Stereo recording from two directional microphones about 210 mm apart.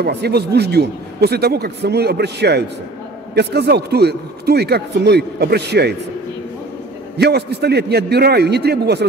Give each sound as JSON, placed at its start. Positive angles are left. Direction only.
{"t": 0.0, "sound": "a man's voice", "side_deg": -50}
{"t": 7.2, "sound": "a man's voice", "side_deg": -50}